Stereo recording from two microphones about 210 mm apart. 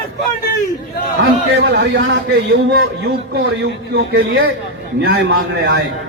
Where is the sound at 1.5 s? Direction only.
60° right (ahead or behind).